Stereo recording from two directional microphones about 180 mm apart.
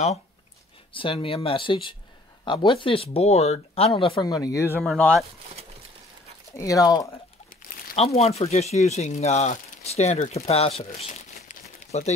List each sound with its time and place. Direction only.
0.9 s speech: 30° left (ahead or behind)
4.7 s speech: 5° left (ahead or behind)
6.5 s speech: 20° left (ahead or behind)
7.4 s speech: 35° left (ahead or behind)
11.0 s crumpling: 40° left (ahead or behind)
11.9 s speech: 40° left (ahead or behind)